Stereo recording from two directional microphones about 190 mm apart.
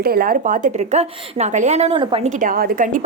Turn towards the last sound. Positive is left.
turn(degrees=-45)  # may be behind; listen again after turning